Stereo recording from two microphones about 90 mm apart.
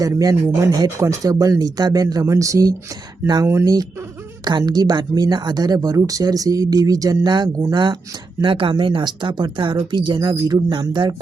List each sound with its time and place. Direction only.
0.0 s speech: 40° right (ahead or behind)
4.4 s speech: 50° right (ahead or behind)
8.4 s speech: 70° right (ahead or behind)